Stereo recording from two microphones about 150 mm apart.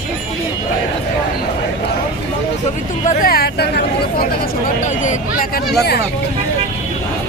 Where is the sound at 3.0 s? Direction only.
55° left (ahead or behind).